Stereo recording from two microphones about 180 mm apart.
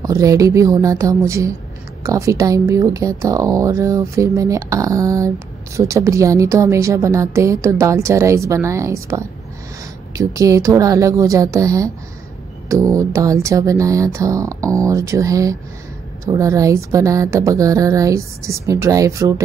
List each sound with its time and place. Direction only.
0.0 s a woman's voice: 20° right (ahead or behind)